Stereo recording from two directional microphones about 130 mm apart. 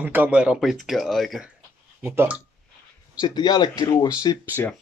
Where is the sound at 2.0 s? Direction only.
10° right (ahead or behind).